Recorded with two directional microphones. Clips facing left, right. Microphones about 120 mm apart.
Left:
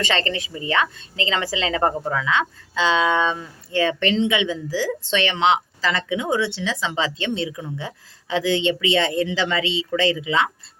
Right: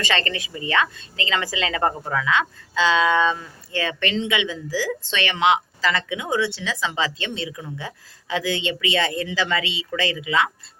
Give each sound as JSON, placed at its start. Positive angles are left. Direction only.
{"t": 0.0, "sound": "a woman's voice", "side_deg": 25}